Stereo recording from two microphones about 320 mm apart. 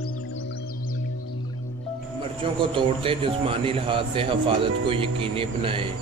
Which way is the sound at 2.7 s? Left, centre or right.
Centre.